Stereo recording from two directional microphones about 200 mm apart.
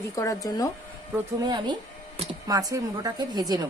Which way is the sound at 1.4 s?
20° right (ahead or behind).